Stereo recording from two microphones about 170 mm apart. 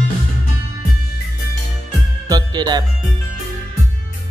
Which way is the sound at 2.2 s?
20° right (ahead or behind).